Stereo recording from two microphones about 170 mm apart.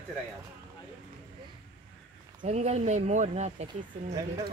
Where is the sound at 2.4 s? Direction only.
40° right (ahead or behind).